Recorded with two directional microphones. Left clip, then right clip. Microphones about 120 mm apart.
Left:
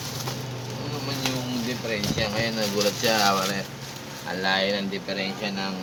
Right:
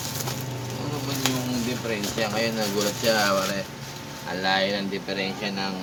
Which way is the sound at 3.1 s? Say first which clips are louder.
Right 1 dB; 80° left.